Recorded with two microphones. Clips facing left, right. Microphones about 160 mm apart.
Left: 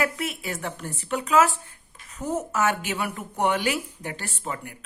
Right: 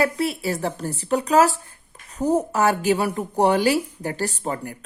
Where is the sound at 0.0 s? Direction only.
35° right (ahead or behind).